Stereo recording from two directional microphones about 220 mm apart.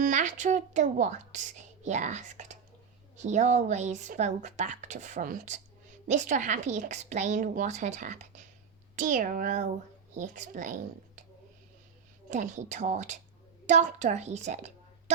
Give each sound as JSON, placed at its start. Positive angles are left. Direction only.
{"t": 0.0, "sound": "speech", "side_deg": -35}
{"t": 12.3, "sound": "a woman's voice", "side_deg": -35}